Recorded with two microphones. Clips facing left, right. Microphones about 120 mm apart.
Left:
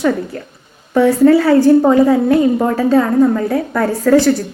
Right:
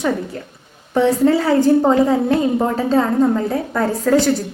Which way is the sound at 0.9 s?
25° right (ahead or behind).